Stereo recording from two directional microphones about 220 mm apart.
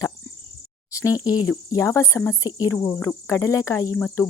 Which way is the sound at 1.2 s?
15° left (ahead or behind).